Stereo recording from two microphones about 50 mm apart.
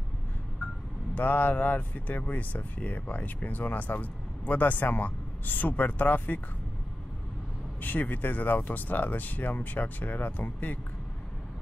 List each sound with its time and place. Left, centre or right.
1.1 s speech: left
7.8 s speech: left